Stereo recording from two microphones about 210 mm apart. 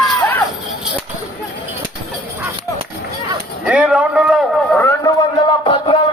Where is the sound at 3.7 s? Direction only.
5° right (ahead or behind).